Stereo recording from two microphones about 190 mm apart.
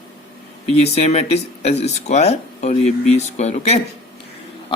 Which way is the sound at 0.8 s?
35° left (ahead or behind).